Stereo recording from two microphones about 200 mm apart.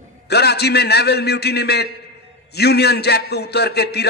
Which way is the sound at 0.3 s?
55° left (ahead or behind).